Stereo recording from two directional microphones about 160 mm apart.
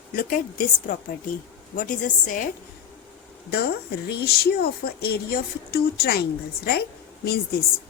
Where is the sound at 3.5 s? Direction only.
80° left.